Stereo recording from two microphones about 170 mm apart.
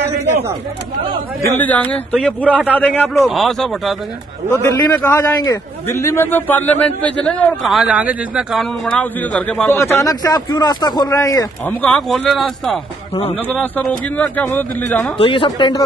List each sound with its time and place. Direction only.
1.6 s a man's voice: 10° left (ahead or behind)
2.4 s a man's voice: 10° right (ahead or behind)
2.7 s a man's voice: 10° left (ahead or behind)
4.5 s a man's voice: 15° left (ahead or behind)
7.7 s a man's voice: 5° right (ahead or behind)
13.1 s a man's voice: 35° left (ahead or behind)
13.5 s a man's voice: 10° left (ahead or behind)
15.1 s speech: 30° left (ahead or behind)